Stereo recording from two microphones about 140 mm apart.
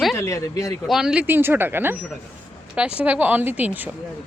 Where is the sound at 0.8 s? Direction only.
5° right (ahead or behind).